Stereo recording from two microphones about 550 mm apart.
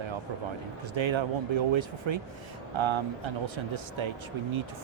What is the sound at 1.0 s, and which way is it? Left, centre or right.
Speech, right.